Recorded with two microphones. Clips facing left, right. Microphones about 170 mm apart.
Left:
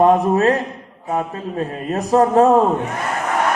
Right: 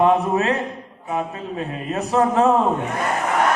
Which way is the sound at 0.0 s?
40° left (ahead or behind).